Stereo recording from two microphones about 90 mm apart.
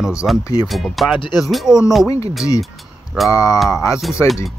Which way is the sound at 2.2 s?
35° left (ahead or behind).